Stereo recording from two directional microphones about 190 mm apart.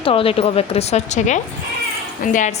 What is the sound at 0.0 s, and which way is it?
A woman's voice, 30° left (ahead or behind).